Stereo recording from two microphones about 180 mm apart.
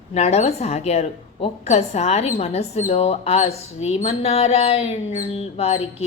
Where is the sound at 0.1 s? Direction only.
35° left (ahead or behind).